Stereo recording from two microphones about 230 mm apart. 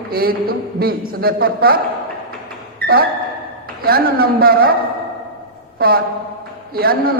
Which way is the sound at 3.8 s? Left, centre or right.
Right.